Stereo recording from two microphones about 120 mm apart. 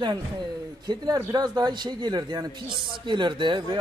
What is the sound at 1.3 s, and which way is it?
Speech, 35° right (ahead or behind).